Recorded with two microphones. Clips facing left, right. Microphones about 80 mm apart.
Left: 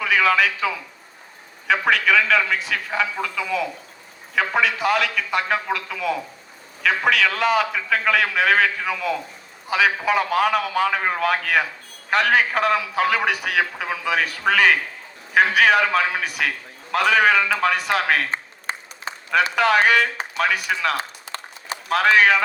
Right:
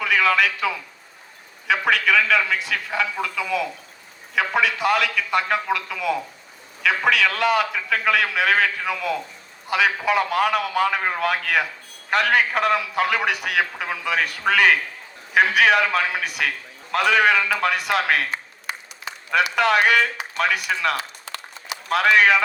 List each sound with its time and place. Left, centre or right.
0.0 s a man's voice: centre
18.3 s a sound: left
19.5 s a man's voice: centre
21.0 s run: left
21.8 s a man's voice: centre